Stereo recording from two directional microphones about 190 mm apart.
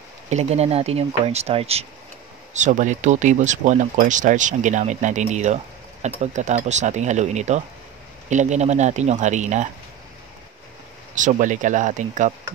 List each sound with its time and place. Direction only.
0.3 s speech: 35° right (ahead or behind)
11.1 s speech: 40° right (ahead or behind)